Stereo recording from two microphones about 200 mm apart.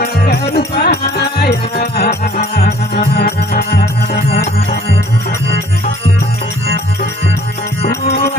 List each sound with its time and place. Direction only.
0.0 s music: 55° left (ahead or behind)
2.0 s music: 40° left (ahead or behind)
8.0 s music: 50° left (ahead or behind)